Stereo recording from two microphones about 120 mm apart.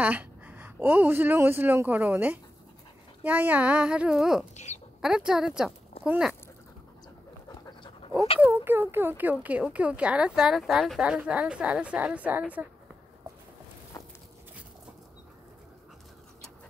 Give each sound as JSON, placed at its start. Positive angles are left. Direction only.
{"t": 0.0, "sound": "speech", "side_deg": -15}
{"t": 7.4, "sound": "dog", "side_deg": 35}
{"t": 8.4, "sound": "speech", "side_deg": -15}
{"t": 13.9, "sound": "a sound", "side_deg": 30}